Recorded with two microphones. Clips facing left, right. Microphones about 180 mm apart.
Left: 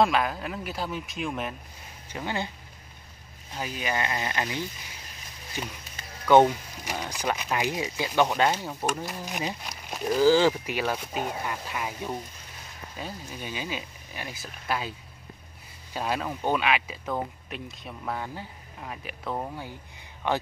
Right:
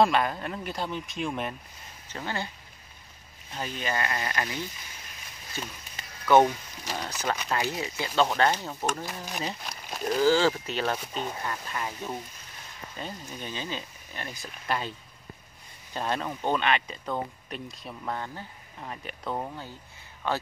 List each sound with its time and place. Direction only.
0.0 s speech: centre (ahead or behind)
2.0 s speech: 15° left (ahead or behind)
3.5 s speech: 10° left (ahead or behind)
20.2 s speech: 15° left (ahead or behind)